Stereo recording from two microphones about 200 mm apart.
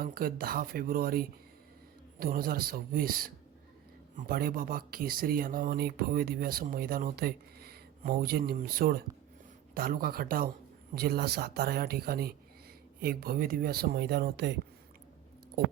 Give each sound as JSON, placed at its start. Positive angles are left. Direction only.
{"t": 0.0, "sound": "speech", "side_deg": -45}